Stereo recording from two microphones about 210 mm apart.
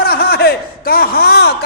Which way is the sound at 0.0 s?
45° left (ahead or behind).